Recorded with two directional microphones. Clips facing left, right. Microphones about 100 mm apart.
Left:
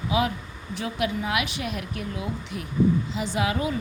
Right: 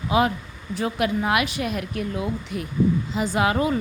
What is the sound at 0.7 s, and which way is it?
Speech, 40° right (ahead or behind).